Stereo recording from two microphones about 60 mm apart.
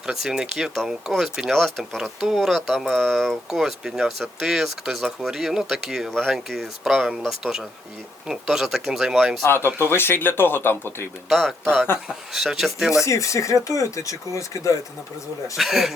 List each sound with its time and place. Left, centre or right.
0.0 s speech: centre
3.5 s speech: centre
9.7 s speech: left
11.3 s speech: centre
12.0 s speech: centre
13.1 s speech: left
15.5 s speech: centre